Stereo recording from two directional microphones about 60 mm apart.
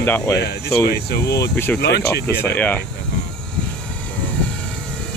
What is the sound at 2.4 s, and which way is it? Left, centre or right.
Speech, left.